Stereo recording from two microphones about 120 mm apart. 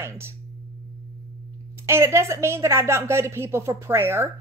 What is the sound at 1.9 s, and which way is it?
A woman's voice, 20° right (ahead or behind).